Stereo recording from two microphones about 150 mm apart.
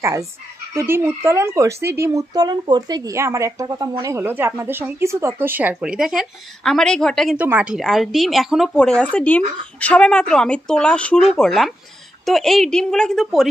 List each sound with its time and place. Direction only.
0.0 s fowl: 20° right (ahead or behind)
0.7 s speech: 15° right (ahead or behind); by 7.3 s 5° left (ahead or behind)
7.3 s speech: 10° right (ahead or behind)